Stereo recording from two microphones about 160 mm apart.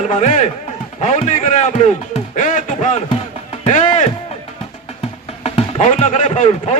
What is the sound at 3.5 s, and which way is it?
Music, 45° left (ahead or behind).